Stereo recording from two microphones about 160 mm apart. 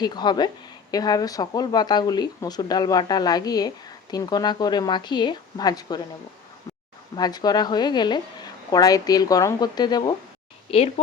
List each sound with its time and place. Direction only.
0.0 s speech: 25° left (ahead or behind)
7.2 s speech: 25° left (ahead or behind)
10.7 s speech: 35° left (ahead or behind)